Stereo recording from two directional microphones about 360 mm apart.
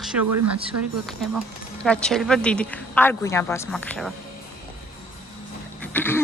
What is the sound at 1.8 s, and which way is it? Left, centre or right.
Speech, centre.